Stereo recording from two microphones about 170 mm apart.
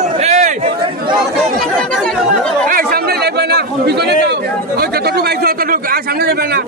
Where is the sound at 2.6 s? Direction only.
60° right (ahead or behind).